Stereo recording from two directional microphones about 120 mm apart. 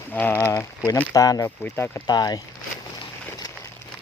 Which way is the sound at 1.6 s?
20° left (ahead or behind).